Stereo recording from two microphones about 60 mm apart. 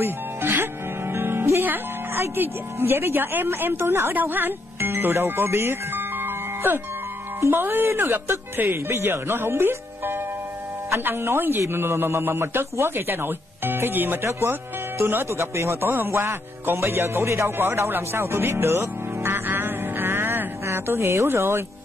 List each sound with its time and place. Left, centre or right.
0.0 s music: right
1.7 s a man's voice: right
4.1 s speech: right
7.3 s a man's voice: right
15.2 s a man's voice: right
17.6 s music: right
20.6 s speech: right